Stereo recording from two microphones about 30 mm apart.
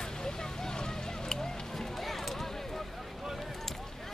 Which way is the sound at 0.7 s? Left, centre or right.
Left.